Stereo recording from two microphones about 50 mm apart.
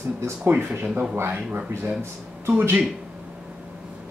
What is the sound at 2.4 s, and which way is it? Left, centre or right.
Speech, right.